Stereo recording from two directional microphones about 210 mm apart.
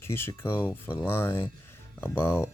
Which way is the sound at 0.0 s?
10° left (ahead or behind).